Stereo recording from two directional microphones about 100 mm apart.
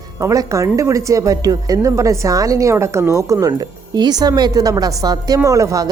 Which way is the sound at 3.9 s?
45° right (ahead or behind).